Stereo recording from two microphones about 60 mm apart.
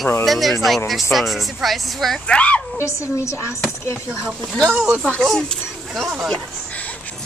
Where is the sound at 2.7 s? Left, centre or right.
Left.